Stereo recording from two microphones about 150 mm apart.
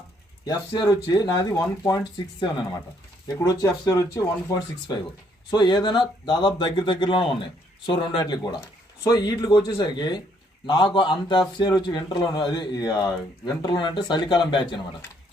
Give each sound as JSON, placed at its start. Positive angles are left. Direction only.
{"t": 0.4, "sound": "a man's voice", "side_deg": 25}
{"t": 3.4, "sound": "a man's voice", "side_deg": 25}